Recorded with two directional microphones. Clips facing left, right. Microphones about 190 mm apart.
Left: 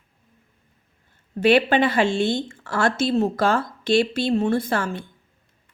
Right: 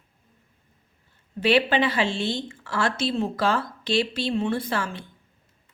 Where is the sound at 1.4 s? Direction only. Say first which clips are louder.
Left 4 dB; 50° left (ahead or behind).